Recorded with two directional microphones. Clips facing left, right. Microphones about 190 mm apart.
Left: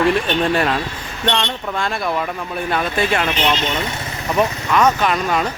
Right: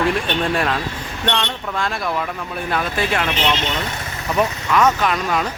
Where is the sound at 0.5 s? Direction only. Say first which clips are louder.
Left 2 dB; centre (ahead or behind).